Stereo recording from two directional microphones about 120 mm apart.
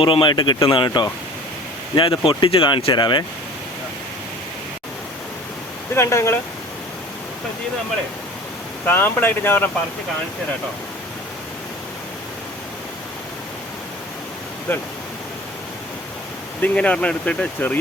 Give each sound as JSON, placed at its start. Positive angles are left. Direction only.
{"t": 0.0, "sound": "speech", "side_deg": 45}
{"t": 2.0, "sound": "speech", "side_deg": 45}
{"t": 5.9, "sound": "speech", "side_deg": 20}
{"t": 8.9, "sound": "speech", "side_deg": 15}
{"t": 14.7, "sound": "speech", "side_deg": 20}
{"t": 16.6, "sound": "speech", "side_deg": 10}